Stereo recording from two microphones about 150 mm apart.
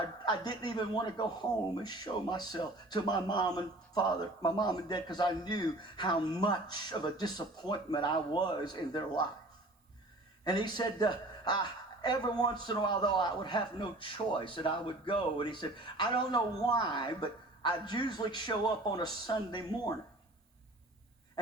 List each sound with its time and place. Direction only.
0.3 s speech: 30° left (ahead or behind)
10.4 s a woman's voice: 30° left (ahead or behind)